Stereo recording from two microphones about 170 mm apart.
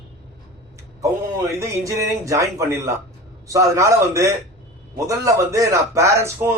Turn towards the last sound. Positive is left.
turn(degrees=-15)  # may be behind; listen again after turning